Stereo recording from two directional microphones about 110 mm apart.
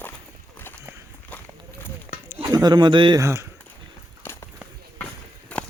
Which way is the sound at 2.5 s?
35° right (ahead or behind).